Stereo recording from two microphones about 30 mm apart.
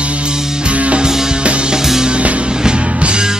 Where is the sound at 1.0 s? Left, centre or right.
Right.